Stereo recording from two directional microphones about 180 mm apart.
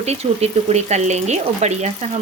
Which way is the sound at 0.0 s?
35° right (ahead or behind).